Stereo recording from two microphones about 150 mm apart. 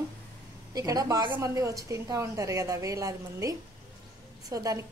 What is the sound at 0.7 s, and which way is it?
A woman's voice, 25° right (ahead or behind).